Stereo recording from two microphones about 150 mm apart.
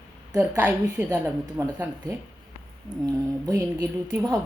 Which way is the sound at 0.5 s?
15° right (ahead or behind).